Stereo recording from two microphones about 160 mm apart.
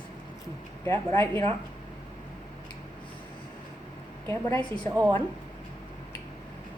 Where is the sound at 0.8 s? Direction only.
15° left (ahead or behind).